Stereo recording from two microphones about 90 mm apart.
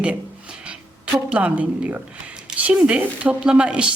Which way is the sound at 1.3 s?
15° right (ahead or behind).